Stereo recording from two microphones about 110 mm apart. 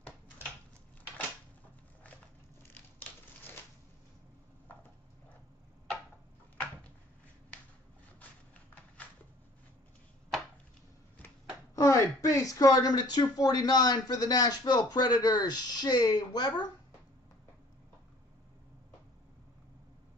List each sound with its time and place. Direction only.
11.7 s speech: 25° left (ahead or behind)